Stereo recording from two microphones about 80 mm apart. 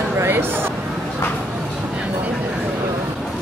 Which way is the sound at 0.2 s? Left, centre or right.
Right.